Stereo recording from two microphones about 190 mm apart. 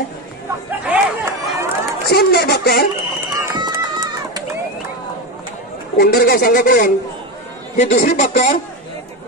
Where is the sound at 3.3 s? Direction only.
20° right (ahead or behind).